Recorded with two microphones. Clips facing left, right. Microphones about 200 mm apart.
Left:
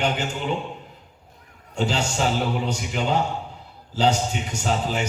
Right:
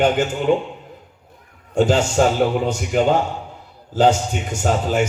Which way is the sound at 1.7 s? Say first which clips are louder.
Right 9 dB; 50° right (ahead or behind).